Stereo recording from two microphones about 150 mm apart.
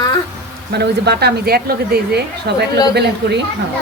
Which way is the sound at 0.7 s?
90° right.